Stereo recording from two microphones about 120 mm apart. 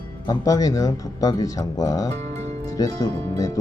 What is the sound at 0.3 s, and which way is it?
Speech, 30° left (ahead or behind).